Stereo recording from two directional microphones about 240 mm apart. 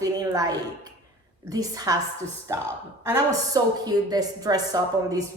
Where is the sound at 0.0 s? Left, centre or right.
Centre.